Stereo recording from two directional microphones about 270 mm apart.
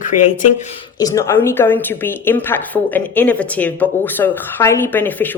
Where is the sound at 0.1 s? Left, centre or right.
Left.